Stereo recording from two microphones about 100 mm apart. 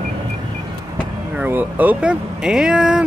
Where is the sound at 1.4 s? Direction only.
15° right (ahead or behind).